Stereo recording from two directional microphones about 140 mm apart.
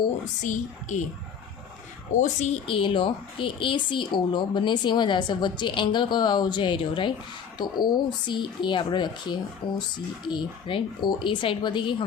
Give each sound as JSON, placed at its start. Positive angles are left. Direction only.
{"t": 0.4, "sound": "speech", "side_deg": 60}
{"t": 2.2, "sound": "speech", "side_deg": 55}
{"t": 2.6, "sound": "speech", "side_deg": 40}